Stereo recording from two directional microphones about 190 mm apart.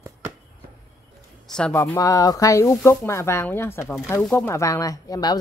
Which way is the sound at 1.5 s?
5° left (ahead or behind).